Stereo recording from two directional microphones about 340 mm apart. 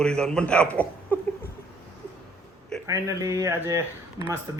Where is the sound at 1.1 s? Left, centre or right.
Centre.